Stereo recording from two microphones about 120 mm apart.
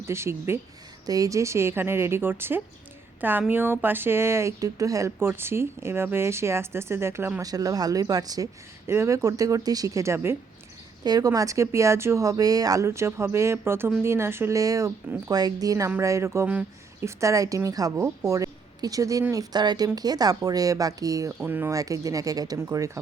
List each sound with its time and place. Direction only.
0.0 s speech: 20° right (ahead or behind)
7.4 s speech: 30° right (ahead or behind)
21.4 s speech: 20° right (ahead or behind)